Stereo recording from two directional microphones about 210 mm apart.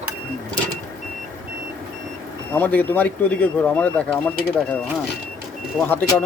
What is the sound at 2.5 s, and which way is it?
Speech, 10° left (ahead or behind).